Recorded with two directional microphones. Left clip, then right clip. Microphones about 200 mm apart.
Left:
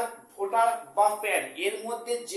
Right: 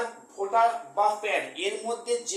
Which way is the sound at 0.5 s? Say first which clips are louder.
Right 1 dB; centre (ahead or behind).